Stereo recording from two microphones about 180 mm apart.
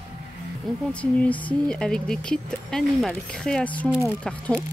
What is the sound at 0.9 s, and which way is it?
Speech, 10° left (ahead or behind).